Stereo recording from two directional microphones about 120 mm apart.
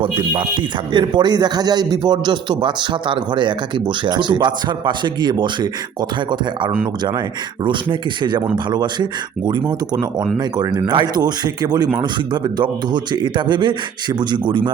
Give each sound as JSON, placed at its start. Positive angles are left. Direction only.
{"t": 0.9, "sound": "a man's voice", "side_deg": -40}
{"t": 7.6, "sound": "a man's voice", "side_deg": -40}